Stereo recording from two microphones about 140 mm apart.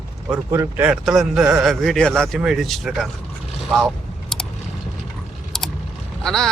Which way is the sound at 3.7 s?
Centre (ahead or behind).